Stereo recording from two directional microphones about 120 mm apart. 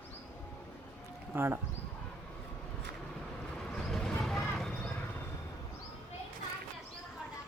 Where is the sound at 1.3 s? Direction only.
20° right (ahead or behind).